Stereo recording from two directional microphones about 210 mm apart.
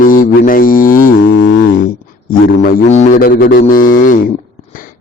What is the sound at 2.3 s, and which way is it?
A man's voice, 35° left (ahead or behind).